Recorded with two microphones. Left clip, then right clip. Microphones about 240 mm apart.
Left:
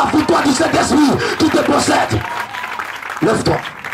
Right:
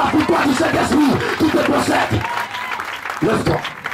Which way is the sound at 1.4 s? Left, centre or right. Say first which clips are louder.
Left 3 dB; centre.